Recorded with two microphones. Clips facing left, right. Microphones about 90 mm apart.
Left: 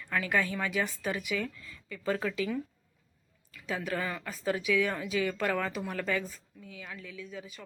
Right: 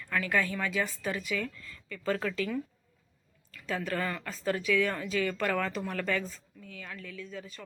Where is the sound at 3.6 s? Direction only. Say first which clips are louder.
Right 1 dB; 15° left (ahead or behind).